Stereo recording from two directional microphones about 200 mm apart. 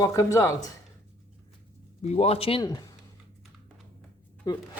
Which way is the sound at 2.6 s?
20° left (ahead or behind).